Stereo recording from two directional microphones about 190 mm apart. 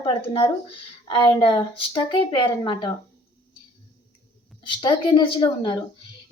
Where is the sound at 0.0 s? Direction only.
25° left (ahead or behind).